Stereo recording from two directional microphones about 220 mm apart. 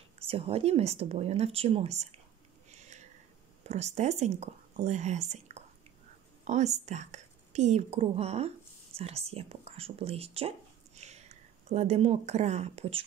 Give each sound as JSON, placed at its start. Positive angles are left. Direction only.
{"t": 0.3, "sound": "speech", "side_deg": -25}
{"t": 2.7, "sound": "a sound", "side_deg": -30}
{"t": 3.6, "sound": "a woman's voice", "side_deg": -30}